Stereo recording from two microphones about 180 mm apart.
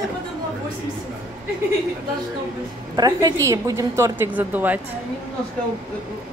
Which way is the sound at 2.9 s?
20° right (ahead or behind).